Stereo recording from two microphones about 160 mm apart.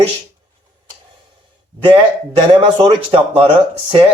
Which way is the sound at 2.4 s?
30° right (ahead or behind).